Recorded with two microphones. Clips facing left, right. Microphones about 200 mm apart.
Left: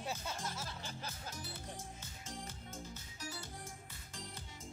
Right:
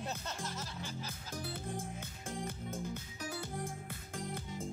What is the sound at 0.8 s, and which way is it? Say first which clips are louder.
Speech: right 2 dB; 55° right (ahead or behind).